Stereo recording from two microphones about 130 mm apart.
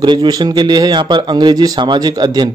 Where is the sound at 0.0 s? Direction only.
35° right (ahead or behind).